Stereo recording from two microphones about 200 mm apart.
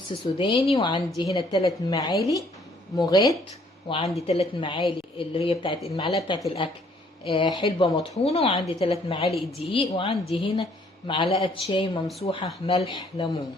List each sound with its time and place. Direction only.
0.3 s a woman's voice: 25° left (ahead or behind)